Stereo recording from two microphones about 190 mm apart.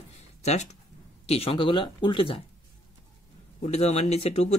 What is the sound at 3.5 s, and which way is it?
Speech, 35° left (ahead or behind).